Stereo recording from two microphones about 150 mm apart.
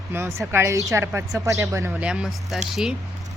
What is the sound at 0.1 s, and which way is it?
A woman's voice, 15° right (ahead or behind).